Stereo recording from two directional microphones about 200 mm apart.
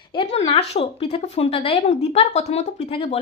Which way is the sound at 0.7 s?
25° left (ahead or behind).